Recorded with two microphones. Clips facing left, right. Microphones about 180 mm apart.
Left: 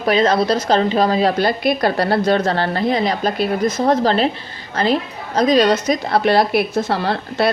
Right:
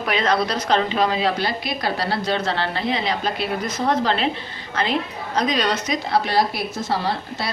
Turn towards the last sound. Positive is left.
turn(degrees=60)  # may be behind; listen again after turning